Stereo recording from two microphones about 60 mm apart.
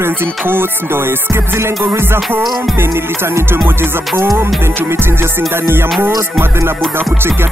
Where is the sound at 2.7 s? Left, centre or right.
Right.